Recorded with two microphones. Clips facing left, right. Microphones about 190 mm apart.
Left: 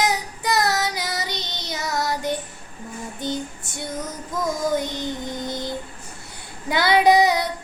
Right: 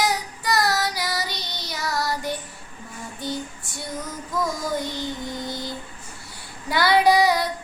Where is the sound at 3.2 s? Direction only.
20° left (ahead or behind).